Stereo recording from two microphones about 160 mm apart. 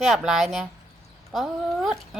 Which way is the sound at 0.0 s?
Centre (ahead or behind).